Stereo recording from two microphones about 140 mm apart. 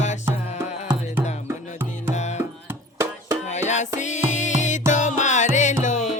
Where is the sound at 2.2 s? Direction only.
55° left (ahead or behind).